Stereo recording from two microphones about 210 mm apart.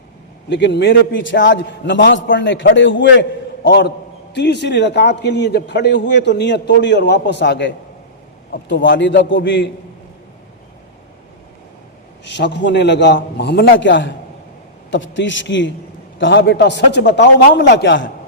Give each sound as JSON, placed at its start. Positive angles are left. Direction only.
{"t": 0.5, "sound": "a man's voice", "side_deg": 55}
{"t": 8.7, "sound": "a man's voice", "side_deg": 60}
{"t": 12.2, "sound": "a man's voice", "side_deg": 55}